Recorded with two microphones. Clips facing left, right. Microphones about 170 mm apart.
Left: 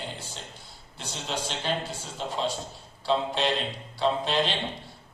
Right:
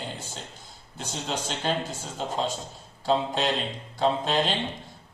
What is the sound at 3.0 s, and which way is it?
A man's voice, 45° right (ahead or behind).